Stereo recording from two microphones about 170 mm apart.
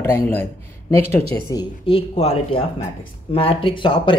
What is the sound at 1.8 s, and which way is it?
Speech, 35° left (ahead or behind).